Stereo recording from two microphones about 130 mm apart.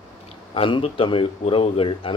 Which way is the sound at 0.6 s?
45° left (ahead or behind).